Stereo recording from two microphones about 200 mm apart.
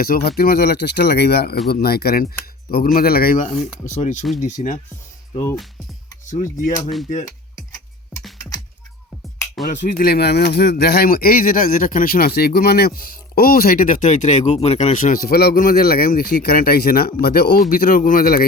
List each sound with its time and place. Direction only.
0.0 s speech: 50° left (ahead or behind)
3.8 s cutlery: 35° left (ahead or behind)
6.2 s cutlery: 40° left (ahead or behind)
9.8 s speech: 45° left (ahead or behind)